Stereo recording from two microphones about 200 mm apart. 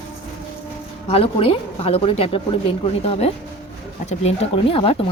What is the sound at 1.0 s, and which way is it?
A woman's voice, 30° left (ahead or behind).